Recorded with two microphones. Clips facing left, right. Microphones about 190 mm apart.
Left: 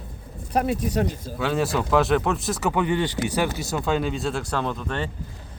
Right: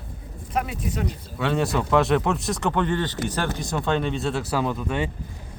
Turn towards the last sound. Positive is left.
turn(degrees=-10)  # may be behind; listen again after turning